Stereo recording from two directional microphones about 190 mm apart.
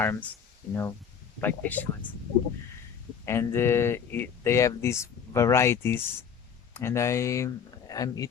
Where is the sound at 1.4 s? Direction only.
10° left (ahead or behind).